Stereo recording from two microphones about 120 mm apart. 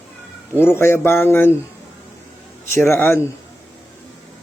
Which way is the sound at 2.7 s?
20° left (ahead or behind).